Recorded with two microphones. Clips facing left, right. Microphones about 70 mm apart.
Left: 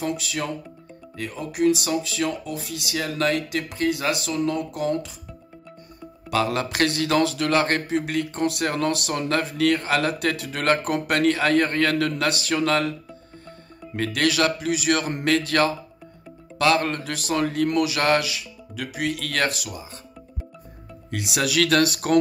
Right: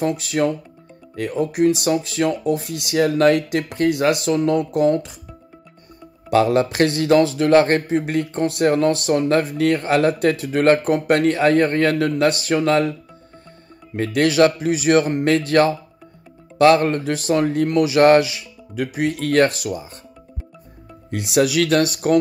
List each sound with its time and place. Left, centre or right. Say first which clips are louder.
0.0 s speech: right 8 dB; right
6.3 s a man's voice: right 7 dB; right
13.9 s a man's voice: right 6 dB; right
21.4 s speech: right 4 dB; right